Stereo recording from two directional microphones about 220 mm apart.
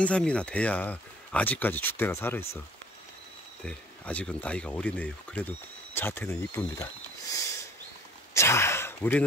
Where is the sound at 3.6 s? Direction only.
5° left (ahead or behind).